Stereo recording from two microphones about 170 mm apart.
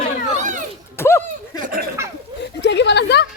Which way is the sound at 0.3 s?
50° right (ahead or behind).